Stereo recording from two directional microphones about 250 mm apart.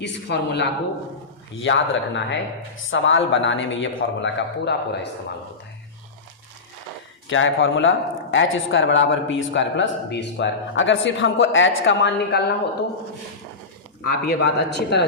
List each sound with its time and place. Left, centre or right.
0.0 s speech: left
7.3 s speech: left
14.0 s speech: left